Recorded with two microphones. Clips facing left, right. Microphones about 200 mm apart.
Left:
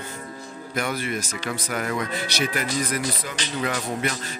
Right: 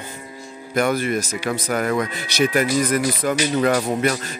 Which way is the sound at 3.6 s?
40° right (ahead or behind).